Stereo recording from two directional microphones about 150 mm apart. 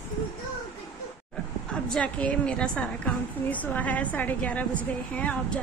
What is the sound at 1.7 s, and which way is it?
A woman's voice, 5° left (ahead or behind).